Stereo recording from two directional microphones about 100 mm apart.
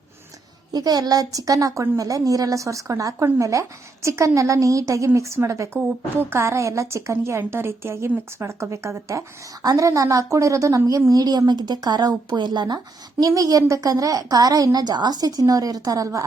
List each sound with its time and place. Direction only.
0.7 s a woman's voice: 40° right (ahead or behind)